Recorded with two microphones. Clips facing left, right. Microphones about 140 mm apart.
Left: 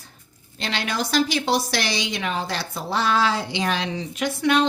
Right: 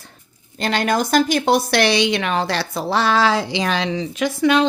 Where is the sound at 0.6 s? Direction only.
45° right (ahead or behind).